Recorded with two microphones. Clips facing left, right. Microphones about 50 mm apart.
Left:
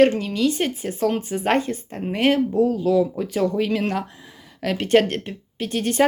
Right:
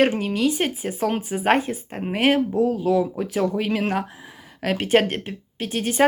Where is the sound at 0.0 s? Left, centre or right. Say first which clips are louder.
Left 2 dB; centre.